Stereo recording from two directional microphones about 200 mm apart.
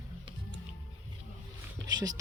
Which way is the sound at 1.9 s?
20° right (ahead or behind).